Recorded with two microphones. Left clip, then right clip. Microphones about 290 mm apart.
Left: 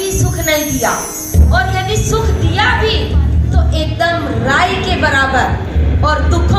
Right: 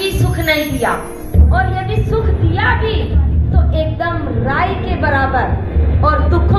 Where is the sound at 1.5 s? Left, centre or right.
Left.